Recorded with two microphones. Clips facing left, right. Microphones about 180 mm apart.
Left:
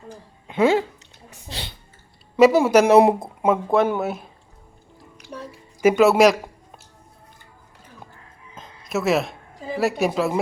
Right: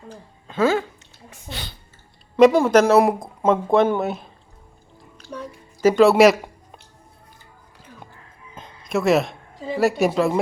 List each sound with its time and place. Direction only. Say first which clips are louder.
0.4 s speech: left 2 dB; 15° left (ahead or behind)
2.3 s speech: right 1 dB; 10° left (ahead or behind)
3.4 s speech: right 2 dB; 5° left (ahead or behind)
5.8 s speech: right 1 dB; 5° left (ahead or behind)
8.5 s a sound: right 2 dB; centre (ahead or behind)
9.7 s speech: right 2 dB; centre (ahead or behind)